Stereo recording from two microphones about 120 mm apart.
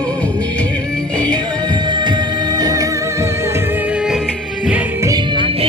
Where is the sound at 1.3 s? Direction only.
35° right (ahead or behind); by 4.2 s 5° right (ahead or behind).